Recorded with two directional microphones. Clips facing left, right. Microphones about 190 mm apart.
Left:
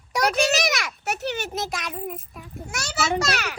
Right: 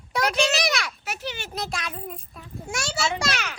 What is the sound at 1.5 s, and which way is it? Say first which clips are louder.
Speech: left 2 dB; 20° left (ahead or behind).